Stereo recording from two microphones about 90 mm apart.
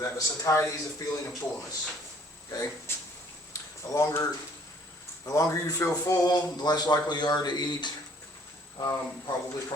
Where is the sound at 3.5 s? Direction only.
35° left (ahead or behind).